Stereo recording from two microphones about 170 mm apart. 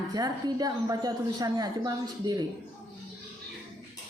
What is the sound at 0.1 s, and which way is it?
A woman's voice, 25° right (ahead or behind).